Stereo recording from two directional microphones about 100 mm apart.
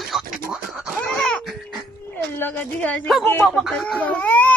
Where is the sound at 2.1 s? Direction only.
20° left (ahead or behind).